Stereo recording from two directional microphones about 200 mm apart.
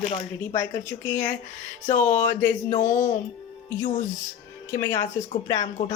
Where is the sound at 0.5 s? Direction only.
10° left (ahead or behind).